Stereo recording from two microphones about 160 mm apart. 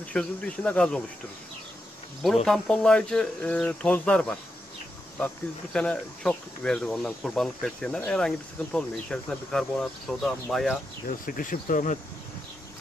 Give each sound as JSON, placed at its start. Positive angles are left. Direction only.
{"t": 0.0, "sound": "speech", "side_deg": 5}
{"t": 2.4, "sound": "speech", "side_deg": 5}
{"t": 11.1, "sound": "speech", "side_deg": 60}